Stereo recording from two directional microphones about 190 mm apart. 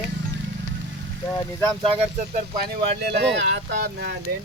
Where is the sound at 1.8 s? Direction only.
30° right (ahead or behind); by 4.2 s 60° right (ahead or behind).